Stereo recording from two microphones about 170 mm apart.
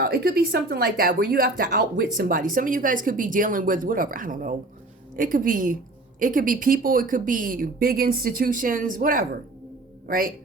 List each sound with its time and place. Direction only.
0.0 s speech: 65° right (ahead or behind)